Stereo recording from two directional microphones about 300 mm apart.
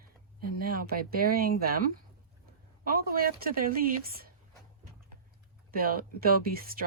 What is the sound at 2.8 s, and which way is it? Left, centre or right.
Speech, right.